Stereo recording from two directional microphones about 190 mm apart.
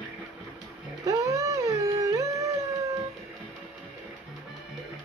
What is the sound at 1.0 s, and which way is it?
Music, 15° right (ahead or behind).